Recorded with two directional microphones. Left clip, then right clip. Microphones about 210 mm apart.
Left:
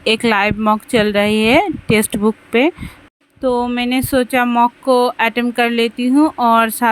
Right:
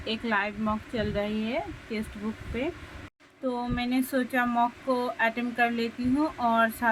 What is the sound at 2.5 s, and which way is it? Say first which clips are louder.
Speech: left 16 dB; 55° left (ahead or behind).